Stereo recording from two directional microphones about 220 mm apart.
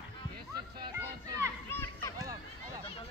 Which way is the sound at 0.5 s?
20° right (ahead or behind).